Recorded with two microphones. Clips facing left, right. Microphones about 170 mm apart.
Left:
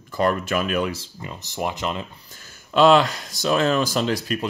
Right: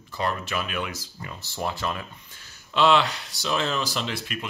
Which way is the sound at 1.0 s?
20° left (ahead or behind).